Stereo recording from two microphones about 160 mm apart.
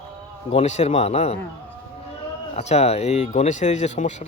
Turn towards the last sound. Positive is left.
turn(degrees=45)  # may be behind; listen again after turning